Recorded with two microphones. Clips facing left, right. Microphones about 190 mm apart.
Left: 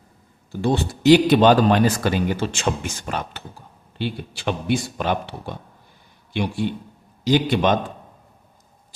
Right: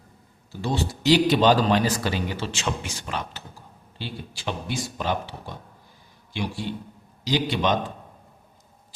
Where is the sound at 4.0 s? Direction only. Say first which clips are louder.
Left 7 dB; 60° left (ahead or behind).